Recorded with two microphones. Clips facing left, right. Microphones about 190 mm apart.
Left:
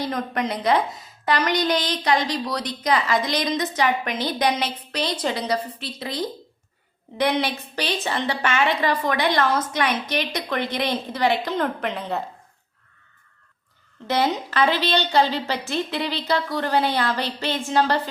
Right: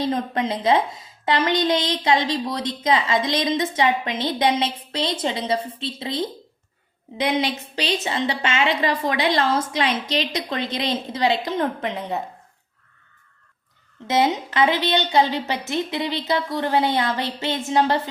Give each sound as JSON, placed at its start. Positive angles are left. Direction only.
{"t": 0.0, "sound": "a woman's voice", "side_deg": -25}
{"t": 14.1, "sound": "a woman's voice", "side_deg": -20}